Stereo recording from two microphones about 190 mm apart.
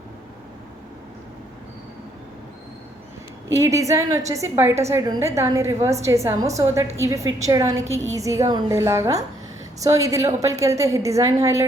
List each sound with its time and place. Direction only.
3.5 s a woman's voice: 15° right (ahead or behind)